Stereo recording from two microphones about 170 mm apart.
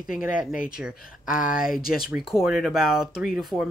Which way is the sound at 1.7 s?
60° left (ahead or behind).